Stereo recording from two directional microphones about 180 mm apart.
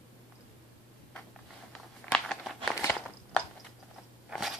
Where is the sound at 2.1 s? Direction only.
5° left (ahead or behind).